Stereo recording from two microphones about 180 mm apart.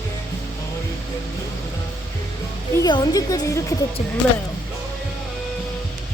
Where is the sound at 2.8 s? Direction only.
25° left (ahead or behind).